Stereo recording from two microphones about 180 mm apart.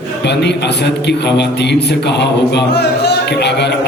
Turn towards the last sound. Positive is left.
turn(degrees=70)  # may be behind; listen again after turning